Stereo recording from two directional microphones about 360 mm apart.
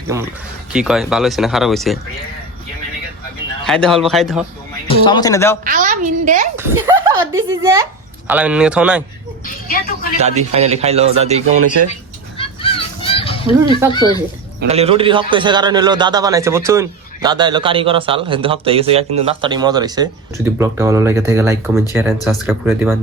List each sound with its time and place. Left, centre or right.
0.1 s a man's voice: centre
3.7 s speech: centre
4.9 s a man's voice: centre
5.6 s a woman's voice: right
6.6 s a man's voice: centre
9.6 s a man's voice: left
10.2 s a man's voice: centre
12.4 s children playing: centre
14.6 s a man's voice: centre